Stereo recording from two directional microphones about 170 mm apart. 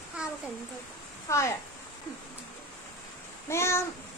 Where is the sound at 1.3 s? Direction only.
15° left (ahead or behind).